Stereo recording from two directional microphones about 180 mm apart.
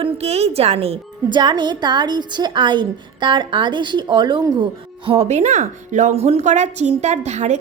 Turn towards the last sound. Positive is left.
turn(degrees=-40)  # may be behind; listen again after turning